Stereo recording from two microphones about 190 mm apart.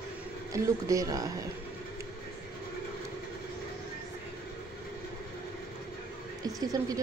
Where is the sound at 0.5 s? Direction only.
15° right (ahead or behind).